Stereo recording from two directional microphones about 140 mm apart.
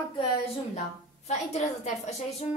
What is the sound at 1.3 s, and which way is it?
Speech, 55° left (ahead or behind).